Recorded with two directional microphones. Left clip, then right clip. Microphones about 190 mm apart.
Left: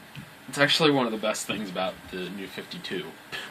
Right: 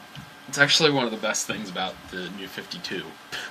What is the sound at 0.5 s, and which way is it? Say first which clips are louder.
Speech: right 2 dB; 10° right (ahead or behind).